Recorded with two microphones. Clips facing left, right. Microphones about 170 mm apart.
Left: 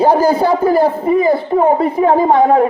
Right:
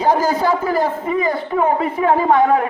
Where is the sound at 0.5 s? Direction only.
35° left (ahead or behind).